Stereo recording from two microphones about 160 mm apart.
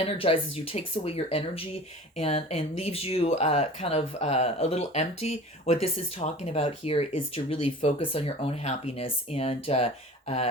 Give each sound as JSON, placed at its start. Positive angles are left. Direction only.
{"t": 0.0, "sound": "speech", "side_deg": 35}